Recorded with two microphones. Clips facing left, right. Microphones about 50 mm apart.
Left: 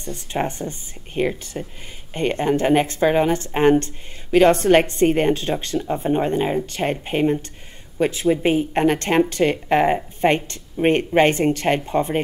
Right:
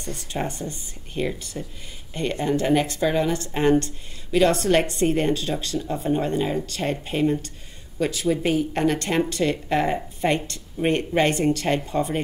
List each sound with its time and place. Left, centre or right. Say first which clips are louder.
0.3 s speech: left 5 dB; left